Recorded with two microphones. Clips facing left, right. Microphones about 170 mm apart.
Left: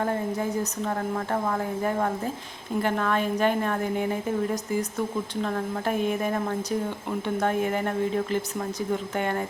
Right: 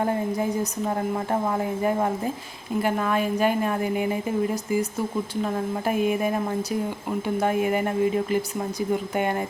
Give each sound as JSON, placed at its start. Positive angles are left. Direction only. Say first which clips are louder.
{"t": 0.0, "sound": "a woman's voice", "louder": "right 2 dB", "side_deg": -15}